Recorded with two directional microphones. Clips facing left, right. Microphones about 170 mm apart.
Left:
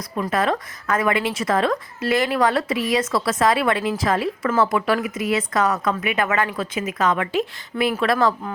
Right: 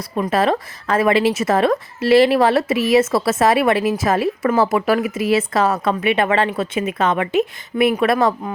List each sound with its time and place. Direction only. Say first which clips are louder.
0.2 s a woman's voice: right 4 dB; 25° right (ahead or behind)